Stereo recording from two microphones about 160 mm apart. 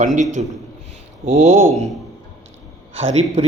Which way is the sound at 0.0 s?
50° right (ahead or behind).